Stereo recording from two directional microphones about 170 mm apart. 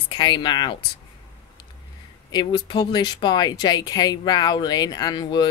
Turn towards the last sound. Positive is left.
turn(degrees=25)  # may be behind; listen again after turning